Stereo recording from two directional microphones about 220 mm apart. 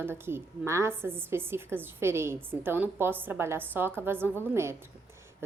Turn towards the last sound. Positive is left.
turn(degrees=-10)  # may be behind; listen again after turning